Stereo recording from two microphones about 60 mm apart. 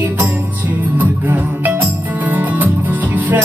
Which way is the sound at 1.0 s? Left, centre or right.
Right.